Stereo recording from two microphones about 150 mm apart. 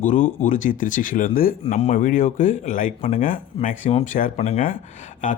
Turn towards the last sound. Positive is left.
turn(degrees=60)  # may be behind; listen again after turning